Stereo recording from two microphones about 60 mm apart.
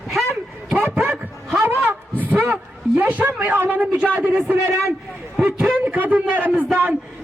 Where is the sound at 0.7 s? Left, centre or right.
Right.